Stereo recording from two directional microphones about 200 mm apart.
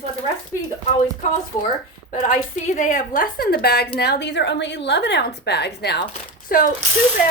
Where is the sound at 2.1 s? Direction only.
40° left (ahead or behind); by 6.0 s 55° left (ahead or behind).